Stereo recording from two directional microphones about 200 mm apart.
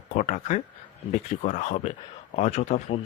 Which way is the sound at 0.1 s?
35° left (ahead or behind).